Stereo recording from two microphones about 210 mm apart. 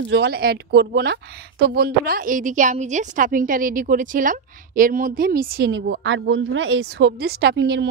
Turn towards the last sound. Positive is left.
turn(degrees=-55)  # may be behind; listen again after turning